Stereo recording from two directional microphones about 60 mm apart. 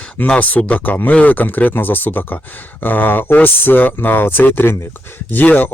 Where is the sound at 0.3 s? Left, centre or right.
Left.